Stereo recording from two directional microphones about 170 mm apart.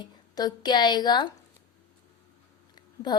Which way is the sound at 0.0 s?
25° left (ahead or behind).